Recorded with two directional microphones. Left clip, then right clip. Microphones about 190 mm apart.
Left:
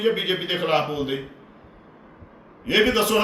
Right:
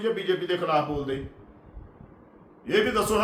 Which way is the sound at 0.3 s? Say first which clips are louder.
Left 3 dB; 20° right (ahead or behind).